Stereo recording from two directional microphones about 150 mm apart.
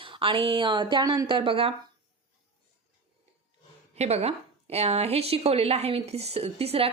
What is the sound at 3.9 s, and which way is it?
Speech, 45° right (ahead or behind).